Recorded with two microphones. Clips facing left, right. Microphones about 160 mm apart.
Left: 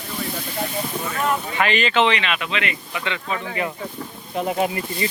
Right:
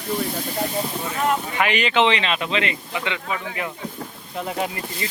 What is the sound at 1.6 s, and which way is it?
Speech, 15° right (ahead or behind).